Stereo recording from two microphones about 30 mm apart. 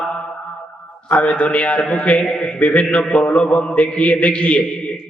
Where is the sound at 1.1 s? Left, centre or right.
Left.